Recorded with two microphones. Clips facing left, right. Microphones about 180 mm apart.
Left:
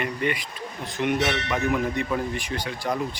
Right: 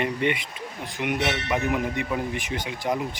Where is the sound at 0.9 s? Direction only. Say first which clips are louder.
Left 2 dB; 15° right (ahead or behind).